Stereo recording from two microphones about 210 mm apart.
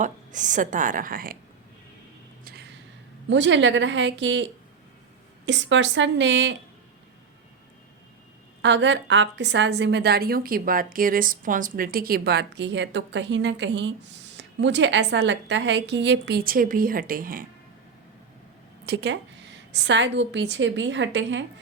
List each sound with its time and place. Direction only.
0.0 s a woman's voice: 35° right (ahead or behind)
2.4 s a sound: 45° right (ahead or behind)
3.2 s a woman's voice: 60° right (ahead or behind)
5.5 s a woman's voice: 60° right (ahead or behind)
8.6 s a woman's voice: 60° right (ahead or behind); by 17.4 s 40° right (ahead or behind)
18.9 s a woman's voice: 55° right (ahead or behind)